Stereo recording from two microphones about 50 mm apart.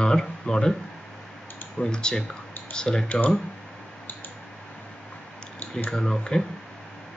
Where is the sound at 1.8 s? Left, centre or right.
Centre.